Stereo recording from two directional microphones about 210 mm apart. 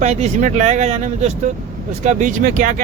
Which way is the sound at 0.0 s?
35° right (ahead or behind).